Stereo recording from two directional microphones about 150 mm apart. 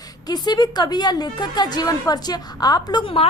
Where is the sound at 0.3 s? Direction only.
30° left (ahead or behind).